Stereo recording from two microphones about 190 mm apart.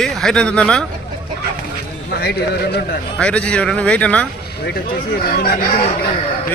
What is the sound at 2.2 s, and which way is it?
Speech, 55° left (ahead or behind).